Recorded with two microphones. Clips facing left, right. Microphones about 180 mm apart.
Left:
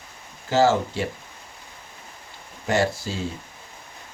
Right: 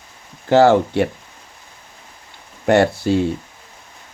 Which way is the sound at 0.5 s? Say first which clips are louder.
Right 7 dB; 60° right (ahead or behind).